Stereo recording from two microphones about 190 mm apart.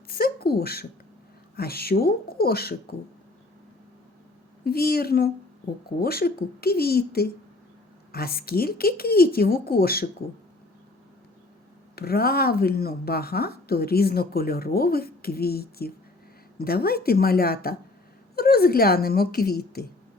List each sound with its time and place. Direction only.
0.1 s a sound: 55° left (ahead or behind)
1.5 s a woman's voice: 55° left (ahead or behind)
4.6 s a woman's voice: 55° left (ahead or behind)
11.9 s a woman's voice: 55° left (ahead or behind)